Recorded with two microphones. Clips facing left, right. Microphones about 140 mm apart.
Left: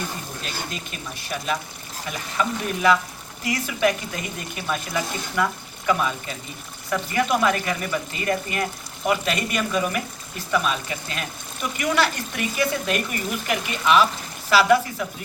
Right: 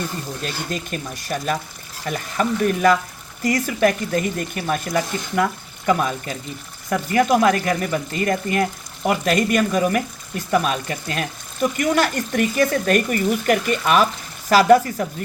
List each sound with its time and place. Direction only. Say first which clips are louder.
0.4 s speech: right 6 dB; 45° right (ahead or behind)